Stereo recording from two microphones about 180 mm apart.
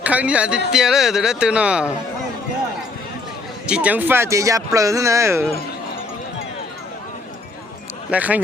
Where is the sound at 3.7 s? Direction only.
5° right (ahead or behind).